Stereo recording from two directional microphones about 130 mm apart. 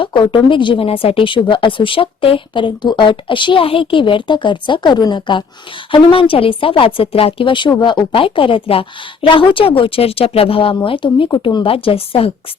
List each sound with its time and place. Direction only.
0.0 s a woman's voice: 40° left (ahead or behind)